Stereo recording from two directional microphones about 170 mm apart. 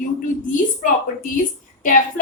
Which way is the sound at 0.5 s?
50° left (ahead or behind).